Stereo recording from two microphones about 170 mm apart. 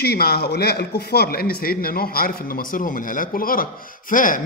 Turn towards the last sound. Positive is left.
turn(degrees=50)  # may be behind; listen again after turning